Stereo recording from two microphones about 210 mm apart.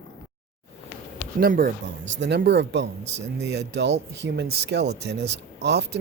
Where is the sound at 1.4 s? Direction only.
45° right (ahead or behind).